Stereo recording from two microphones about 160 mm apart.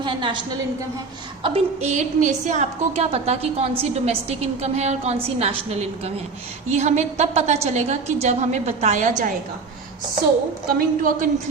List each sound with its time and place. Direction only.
0.0 s a woman's voice: 30° right (ahead or behind)
1.5 s a woman's voice: 40° right (ahead or behind)
10.7 s a woman's voice: 60° right (ahead or behind)